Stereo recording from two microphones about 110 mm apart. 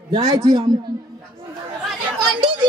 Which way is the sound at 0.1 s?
40° right (ahead or behind).